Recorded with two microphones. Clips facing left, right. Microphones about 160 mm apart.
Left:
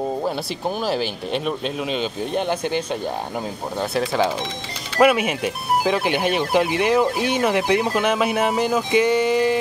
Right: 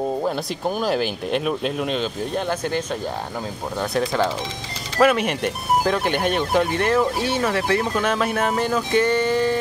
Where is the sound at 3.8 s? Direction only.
5° left (ahead or behind).